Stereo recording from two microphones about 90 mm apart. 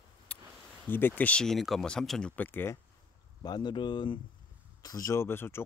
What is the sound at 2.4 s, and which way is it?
Speech, 25° left (ahead or behind).